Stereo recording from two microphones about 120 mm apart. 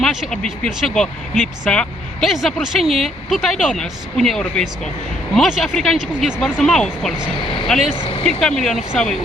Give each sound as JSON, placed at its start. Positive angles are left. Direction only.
{"t": 0.0, "sound": "speech", "side_deg": 0}
{"t": 7.3, "sound": "speech", "side_deg": 40}
{"t": 7.7, "sound": "speech", "side_deg": 0}
{"t": 7.9, "sound": "speech", "side_deg": 45}
{"t": 8.2, "sound": "speech", "side_deg": 5}